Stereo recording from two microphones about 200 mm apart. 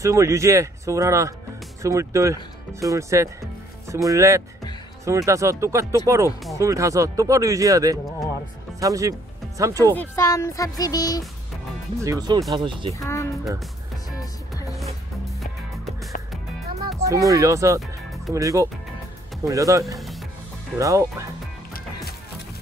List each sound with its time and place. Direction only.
0.0 s speech: 15° right (ahead or behind)
9.9 s speech: 15° left (ahead or behind)
12.0 s speech: 15° right (ahead or behind)
13.0 s speech: 15° left (ahead or behind)
15.4 s music: centre (ahead or behind)
17.0 s speech: 15° right (ahead or behind)
17.7 s music: centre (ahead or behind)
18.3 s speech: 15° right (ahead or behind)
20.0 s music: centre (ahead or behind)
20.7 s speech: 15° right (ahead or behind)